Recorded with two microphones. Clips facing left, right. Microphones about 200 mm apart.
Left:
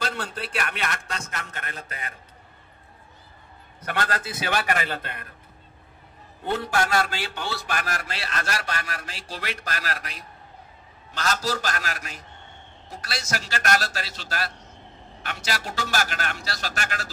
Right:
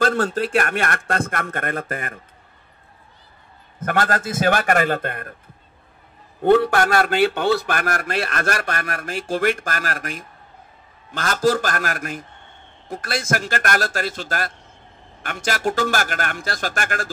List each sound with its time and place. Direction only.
0.0 s a man's voice: 45° right (ahead or behind)
3.8 s a man's voice: 45° right (ahead or behind)
6.4 s a man's voice: 60° right (ahead or behind)